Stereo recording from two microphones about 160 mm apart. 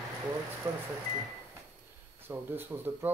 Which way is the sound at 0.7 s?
15° right (ahead or behind).